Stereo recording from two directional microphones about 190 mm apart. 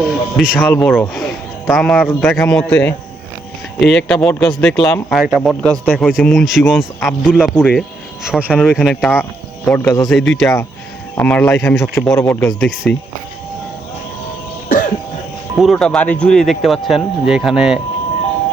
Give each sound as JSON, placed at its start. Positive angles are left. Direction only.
{"t": 0.1, "sound": "speech", "side_deg": 0}
{"t": 8.4, "sound": "speech", "side_deg": 5}
{"t": 9.6, "sound": "speech", "side_deg": 10}
{"t": 10.1, "sound": "speech", "side_deg": 0}
{"t": 14.7, "sound": "throat clearing", "side_deg": 45}
{"t": 15.5, "sound": "speech", "side_deg": 0}